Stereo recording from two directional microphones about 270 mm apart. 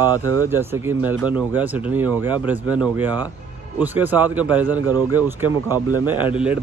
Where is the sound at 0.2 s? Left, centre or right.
Right.